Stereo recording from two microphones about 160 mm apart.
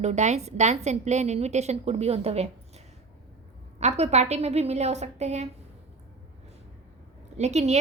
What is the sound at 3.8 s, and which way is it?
A woman's voice, 45° right (ahead or behind).